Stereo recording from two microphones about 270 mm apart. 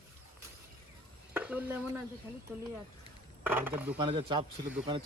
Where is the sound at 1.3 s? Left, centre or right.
Centre.